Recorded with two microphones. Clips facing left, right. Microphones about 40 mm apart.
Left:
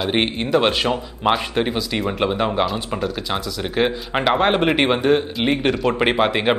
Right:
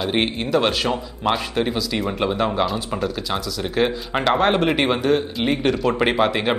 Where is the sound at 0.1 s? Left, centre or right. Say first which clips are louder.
Left 2 dB; centre.